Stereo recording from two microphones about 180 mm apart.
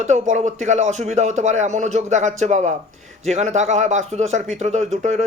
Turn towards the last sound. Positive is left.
turn(degrees=-40)  # may be behind; listen again after turning